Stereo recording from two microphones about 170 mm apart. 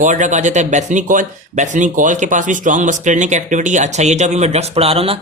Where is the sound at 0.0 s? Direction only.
45° right (ahead or behind).